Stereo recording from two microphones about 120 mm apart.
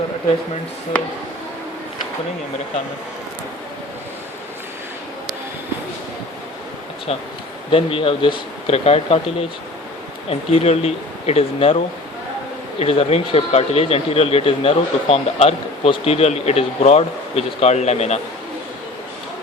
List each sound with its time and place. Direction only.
7.7 s speech: 50° left (ahead or behind)
12.8 s speech: 55° left (ahead or behind)